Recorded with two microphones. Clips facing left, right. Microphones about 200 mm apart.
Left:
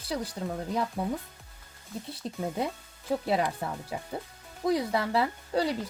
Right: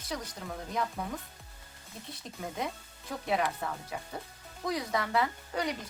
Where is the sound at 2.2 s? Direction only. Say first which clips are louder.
Left 5 dB; 30° left (ahead or behind).